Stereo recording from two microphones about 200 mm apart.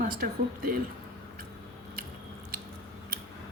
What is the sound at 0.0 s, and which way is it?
Speech, 45° right (ahead or behind).